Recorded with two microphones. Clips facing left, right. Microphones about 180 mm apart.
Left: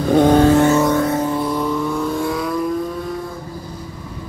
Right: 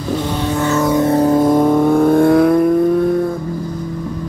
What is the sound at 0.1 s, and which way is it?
Vehicle, 50° left (ahead or behind).